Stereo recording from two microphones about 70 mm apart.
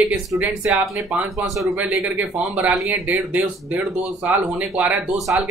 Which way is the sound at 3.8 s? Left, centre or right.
Centre.